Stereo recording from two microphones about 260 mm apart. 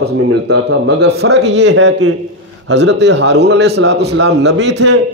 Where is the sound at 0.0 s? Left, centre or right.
Right.